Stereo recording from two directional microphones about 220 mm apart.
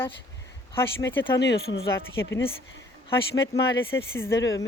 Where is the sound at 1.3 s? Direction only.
50° left (ahead or behind).